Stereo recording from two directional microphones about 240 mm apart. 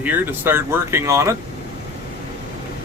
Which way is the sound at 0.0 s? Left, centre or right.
Centre.